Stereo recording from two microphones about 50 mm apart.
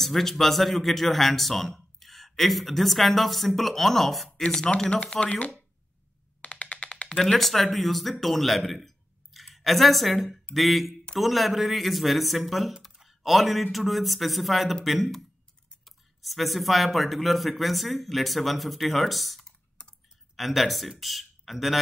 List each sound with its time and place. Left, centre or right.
0.0 s speech: centre
5.0 s speech: left
6.4 s music: left
7.4 s a man's voice: centre